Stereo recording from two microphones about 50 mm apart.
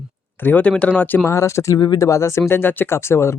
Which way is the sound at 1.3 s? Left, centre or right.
Left.